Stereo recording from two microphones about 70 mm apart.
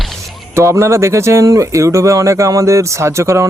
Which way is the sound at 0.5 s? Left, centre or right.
Right.